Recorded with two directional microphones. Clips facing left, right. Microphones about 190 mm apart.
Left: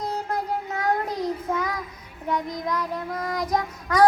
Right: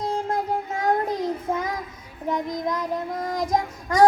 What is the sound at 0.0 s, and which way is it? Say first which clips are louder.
Child singing: right 3 dB; 25° right (ahead or behind).